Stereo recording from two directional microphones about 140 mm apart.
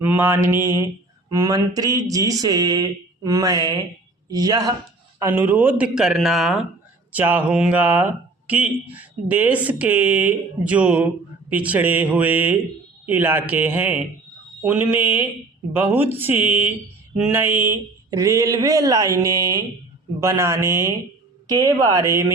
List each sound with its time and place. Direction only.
0.0 s speech: 10° right (ahead or behind)
5.2 s speech: 15° right (ahead or behind)
7.1 s speech: 10° right (ahead or behind)